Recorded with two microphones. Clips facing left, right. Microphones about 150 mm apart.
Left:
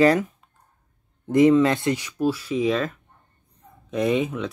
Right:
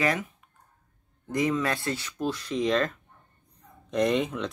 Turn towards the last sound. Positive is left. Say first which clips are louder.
# left 2 dB
turn(degrees=5)  # may be behind; listen again after turning